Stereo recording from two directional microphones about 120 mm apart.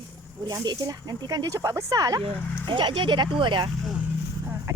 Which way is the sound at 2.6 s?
45° right (ahead or behind).